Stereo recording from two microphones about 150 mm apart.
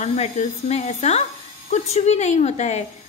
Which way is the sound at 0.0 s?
50° left (ahead or behind).